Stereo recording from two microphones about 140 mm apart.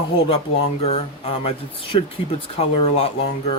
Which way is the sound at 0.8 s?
45° left (ahead or behind).